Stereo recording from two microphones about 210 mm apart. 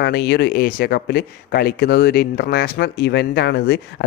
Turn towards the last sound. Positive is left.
turn(degrees=50)  # may be behind; listen again after turning